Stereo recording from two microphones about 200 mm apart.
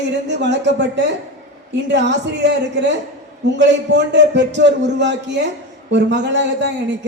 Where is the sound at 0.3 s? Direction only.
60° right (ahead or behind).